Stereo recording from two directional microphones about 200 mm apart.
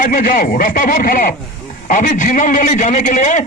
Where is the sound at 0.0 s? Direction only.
45° left (ahead or behind).